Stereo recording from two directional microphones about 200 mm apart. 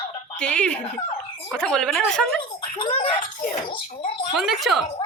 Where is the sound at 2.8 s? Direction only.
30° left (ahead or behind).